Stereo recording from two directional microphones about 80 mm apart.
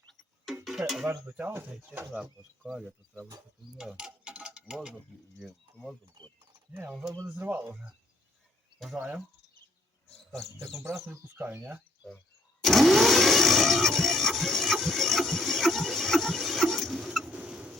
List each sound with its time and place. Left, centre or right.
1.0 s speech: centre
1.5 s speech: right
1.9 s speech: centre
3.7 s mechanisms: centre
5.4 s speech: centre
7.3 s speech: right
9.0 s speech: right
10.8 s speech: right
12.6 s a sound: centre